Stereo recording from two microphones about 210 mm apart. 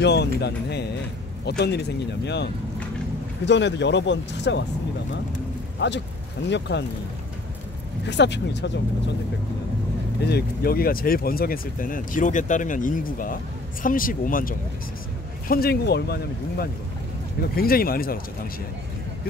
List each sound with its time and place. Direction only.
0.0 s speech: 55° left (ahead or behind)
5.8 s speech: 55° left (ahead or behind)
8.1 s speech: 55° left (ahead or behind)
10.2 s speech: 50° left (ahead or behind)